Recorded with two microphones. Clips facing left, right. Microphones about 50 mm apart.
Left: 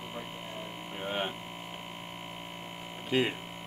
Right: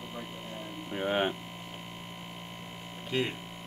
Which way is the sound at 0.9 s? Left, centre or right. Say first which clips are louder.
Right 5 dB; centre.